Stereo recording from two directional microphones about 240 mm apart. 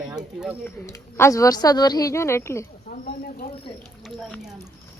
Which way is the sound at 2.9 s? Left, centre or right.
Left.